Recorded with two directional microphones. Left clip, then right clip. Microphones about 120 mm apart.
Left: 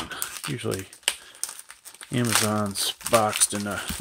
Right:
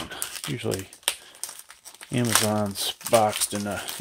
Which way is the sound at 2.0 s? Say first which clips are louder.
Even; 5° right (ahead or behind).